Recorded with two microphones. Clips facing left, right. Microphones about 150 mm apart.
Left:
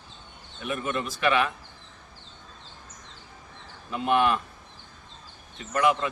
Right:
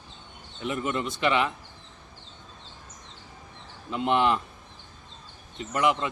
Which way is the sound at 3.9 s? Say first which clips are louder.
Even; 20° right (ahead or behind).